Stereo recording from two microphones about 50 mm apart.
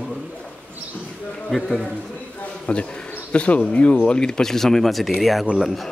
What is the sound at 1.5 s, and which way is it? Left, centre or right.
Speech, centre.